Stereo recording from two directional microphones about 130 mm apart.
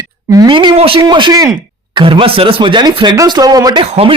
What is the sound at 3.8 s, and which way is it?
Speech, 50° right (ahead or behind).